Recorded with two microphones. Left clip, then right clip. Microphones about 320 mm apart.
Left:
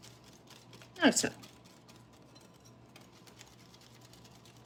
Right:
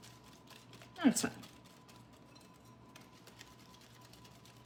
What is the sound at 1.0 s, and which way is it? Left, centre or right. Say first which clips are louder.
Speech: left 6 dB; centre.